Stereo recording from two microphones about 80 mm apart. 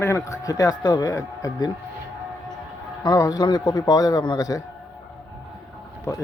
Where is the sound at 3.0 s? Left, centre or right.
Left.